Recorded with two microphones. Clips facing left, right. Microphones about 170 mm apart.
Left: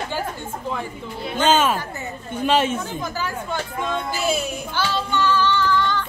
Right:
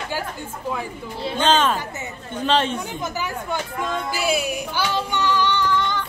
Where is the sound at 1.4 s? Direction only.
10° left (ahead or behind).